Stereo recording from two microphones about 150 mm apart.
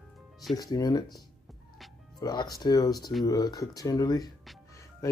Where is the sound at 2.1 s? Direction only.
25° left (ahead or behind).